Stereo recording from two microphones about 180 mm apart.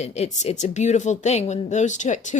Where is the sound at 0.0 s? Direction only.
40° left (ahead or behind).